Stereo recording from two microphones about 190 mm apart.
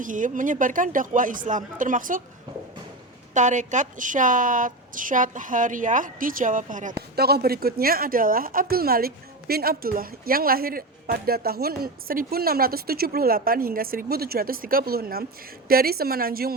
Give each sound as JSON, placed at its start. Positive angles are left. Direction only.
{"t": 0.0, "sound": "a woman's voice", "side_deg": -45}
{"t": 3.3, "sound": "a woman's voice", "side_deg": -40}
{"t": 7.2, "sound": "a woman's voice", "side_deg": -55}